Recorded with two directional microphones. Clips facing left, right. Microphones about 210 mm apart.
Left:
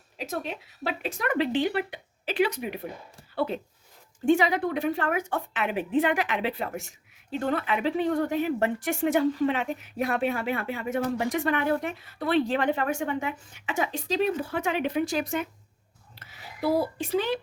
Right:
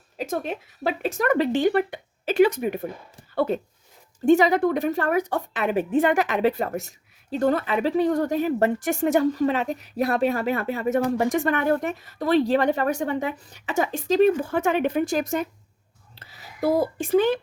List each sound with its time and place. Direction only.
0.2 s a woman's voice: 50° right (ahead or behind)
16.1 s a sound: 35° right (ahead or behind)
16.6 s speech: 45° right (ahead or behind)